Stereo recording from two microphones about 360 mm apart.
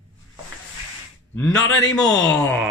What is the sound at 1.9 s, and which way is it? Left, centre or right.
Speech, centre.